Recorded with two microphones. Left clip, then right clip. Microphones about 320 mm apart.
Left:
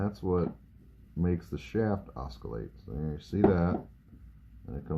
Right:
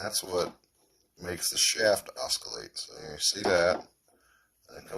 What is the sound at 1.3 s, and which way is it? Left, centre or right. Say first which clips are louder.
A man's voice: right 9 dB; right.